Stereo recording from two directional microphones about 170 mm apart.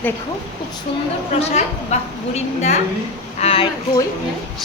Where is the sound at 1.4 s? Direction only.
40° left (ahead or behind).